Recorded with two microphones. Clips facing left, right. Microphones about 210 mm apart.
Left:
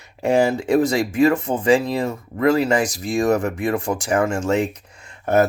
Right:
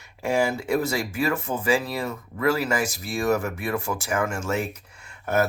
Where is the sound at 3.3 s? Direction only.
30° left (ahead or behind).